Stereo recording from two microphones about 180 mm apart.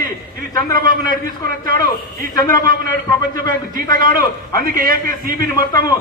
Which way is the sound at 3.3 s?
50° right (ahead or behind).